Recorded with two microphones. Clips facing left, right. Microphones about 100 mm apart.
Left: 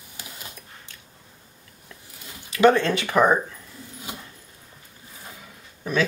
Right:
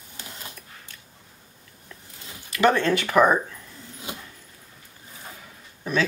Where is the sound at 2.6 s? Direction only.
20° left (ahead or behind).